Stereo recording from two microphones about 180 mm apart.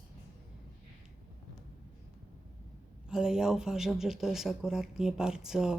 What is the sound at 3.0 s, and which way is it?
Speech, 5° right (ahead or behind).